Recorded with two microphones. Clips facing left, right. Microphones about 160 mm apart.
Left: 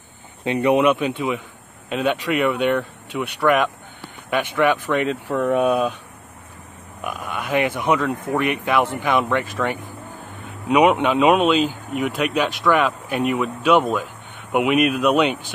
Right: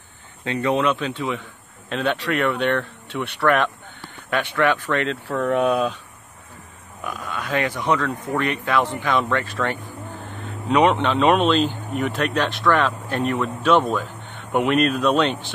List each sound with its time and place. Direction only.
0.5 s speech: 15° left (ahead or behind)
7.1 s speech: 20° left (ahead or behind)